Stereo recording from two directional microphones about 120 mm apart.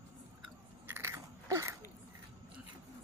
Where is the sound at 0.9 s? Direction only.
20° right (ahead or behind).